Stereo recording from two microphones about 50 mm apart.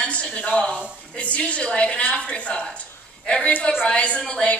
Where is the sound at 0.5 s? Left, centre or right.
Left.